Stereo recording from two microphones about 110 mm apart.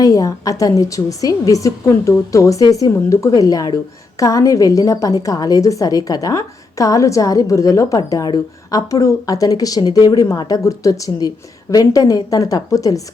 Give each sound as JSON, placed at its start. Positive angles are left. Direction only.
{"t": 0.0, "sound": "a woman's voice", "side_deg": 35}